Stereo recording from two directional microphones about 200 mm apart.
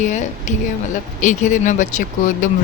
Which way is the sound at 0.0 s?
35° left (ahead or behind).